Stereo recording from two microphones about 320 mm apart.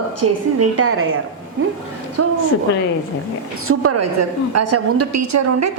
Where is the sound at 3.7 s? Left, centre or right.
Right.